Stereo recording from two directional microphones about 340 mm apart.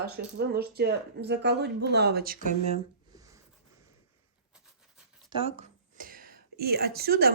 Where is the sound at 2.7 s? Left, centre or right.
Centre.